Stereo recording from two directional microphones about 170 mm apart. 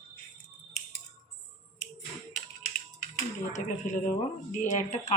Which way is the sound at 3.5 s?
45° left (ahead or behind).